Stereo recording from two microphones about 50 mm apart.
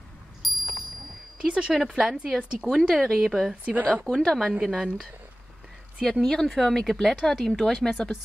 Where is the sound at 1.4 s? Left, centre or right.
Centre.